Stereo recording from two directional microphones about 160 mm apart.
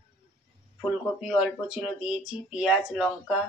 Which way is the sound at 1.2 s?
5° right (ahead or behind).